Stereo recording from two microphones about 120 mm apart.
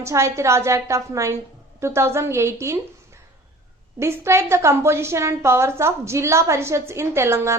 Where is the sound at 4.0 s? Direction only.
25° right (ahead or behind).